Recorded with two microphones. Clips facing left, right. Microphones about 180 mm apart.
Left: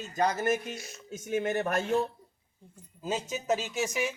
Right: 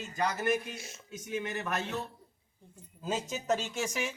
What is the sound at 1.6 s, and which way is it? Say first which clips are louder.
Speech: left 6 dB; 45° left (ahead or behind).